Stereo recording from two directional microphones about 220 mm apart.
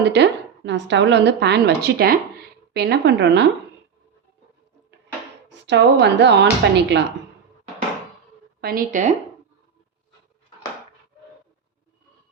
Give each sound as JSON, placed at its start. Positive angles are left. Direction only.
{"t": 0.0, "sound": "a woman's voice", "side_deg": -50}
{"t": 5.5, "sound": "a woman's voice", "side_deg": -50}
{"t": 8.6, "sound": "speech", "side_deg": -40}